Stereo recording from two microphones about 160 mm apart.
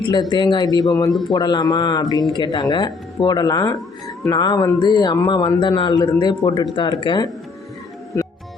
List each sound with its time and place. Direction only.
0.0 s a man's voice: 25° left (ahead or behind)